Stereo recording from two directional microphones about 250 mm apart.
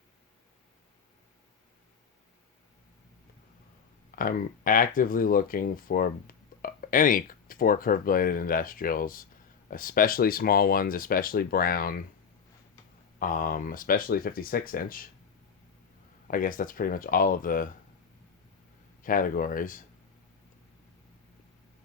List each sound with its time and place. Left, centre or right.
4.1 s speech: left
13.1 s speech: left
16.2 s speech: left
19.0 s speech: left